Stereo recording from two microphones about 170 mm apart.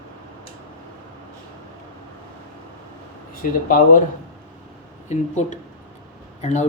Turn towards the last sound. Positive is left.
turn(degrees=45)  # may be behind; listen again after turning